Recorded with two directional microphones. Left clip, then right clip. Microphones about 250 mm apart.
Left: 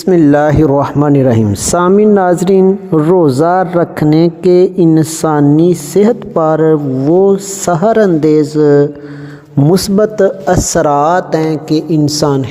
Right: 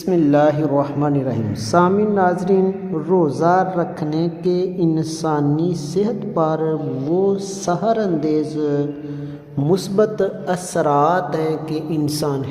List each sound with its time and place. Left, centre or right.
0.1 s a woman's voice: left